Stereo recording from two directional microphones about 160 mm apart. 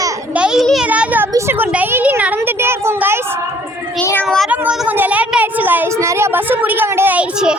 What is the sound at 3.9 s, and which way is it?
Speech, 10° left (ahead or behind).